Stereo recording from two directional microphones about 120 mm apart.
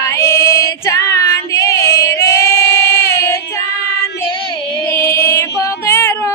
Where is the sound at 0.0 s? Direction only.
25° left (ahead or behind).